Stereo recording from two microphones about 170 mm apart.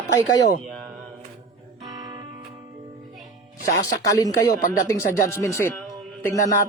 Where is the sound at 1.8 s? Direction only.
20° right (ahead or behind).